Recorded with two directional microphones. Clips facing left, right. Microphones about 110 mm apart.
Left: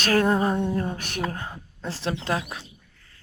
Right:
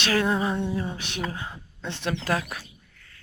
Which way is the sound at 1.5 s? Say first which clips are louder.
Left 2 dB; 35° left (ahead or behind).